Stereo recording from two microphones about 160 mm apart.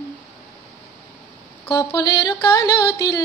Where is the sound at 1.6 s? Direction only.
25° left (ahead or behind).